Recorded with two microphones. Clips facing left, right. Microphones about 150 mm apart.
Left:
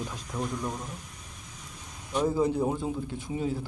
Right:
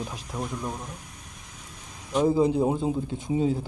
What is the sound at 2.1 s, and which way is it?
Speech, 20° right (ahead or behind).